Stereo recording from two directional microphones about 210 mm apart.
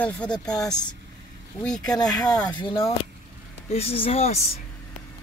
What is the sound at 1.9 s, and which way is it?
Speech, 20° left (ahead or behind).